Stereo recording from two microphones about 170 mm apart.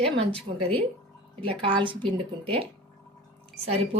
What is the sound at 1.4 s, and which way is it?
A woman's voice, 30° right (ahead or behind).